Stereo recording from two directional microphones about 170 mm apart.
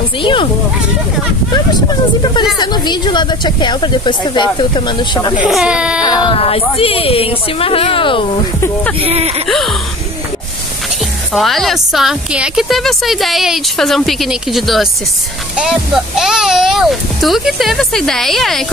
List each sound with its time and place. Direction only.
0.2 s speech: 30° left (ahead or behind)
2.6 s speech: 25° left (ahead or behind)
5.4 s speech: 5° right (ahead or behind)
6.0 s a woman's voice: 25° left (ahead or behind)
9.0 s speech: 35° right (ahead or behind)
11.3 s speech: centre (ahead or behind)